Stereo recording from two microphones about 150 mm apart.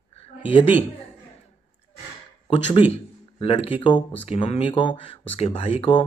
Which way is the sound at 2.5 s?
35° left (ahead or behind).